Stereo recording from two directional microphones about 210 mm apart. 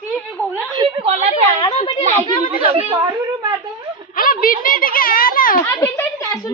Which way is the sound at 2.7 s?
25° right (ahead or behind).